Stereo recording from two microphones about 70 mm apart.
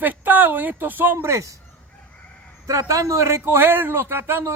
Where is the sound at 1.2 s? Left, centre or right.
Right.